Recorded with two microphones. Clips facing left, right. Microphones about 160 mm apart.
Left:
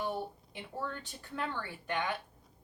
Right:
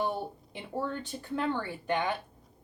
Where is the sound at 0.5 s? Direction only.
25° right (ahead or behind).